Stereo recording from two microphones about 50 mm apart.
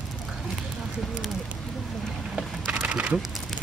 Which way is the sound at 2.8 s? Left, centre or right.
Right.